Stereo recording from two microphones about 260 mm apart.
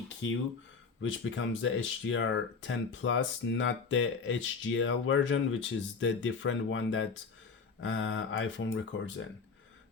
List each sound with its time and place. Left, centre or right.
0.2 s speech: left